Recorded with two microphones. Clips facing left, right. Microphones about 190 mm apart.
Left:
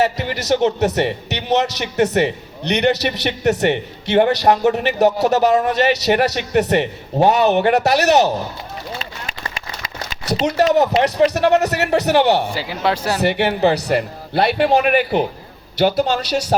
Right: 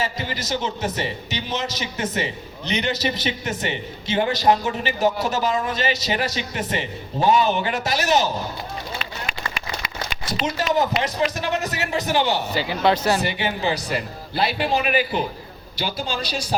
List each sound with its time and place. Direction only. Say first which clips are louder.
0.0 s a man's voice: left 8 dB; 70° left (ahead or behind)
10.6 s a man's voice: left 8 dB; 65° left (ahead or behind)
12.5 s speech: even; 5° left (ahead or behind)
13.1 s a man's voice: left 7 dB; 65° left (ahead or behind)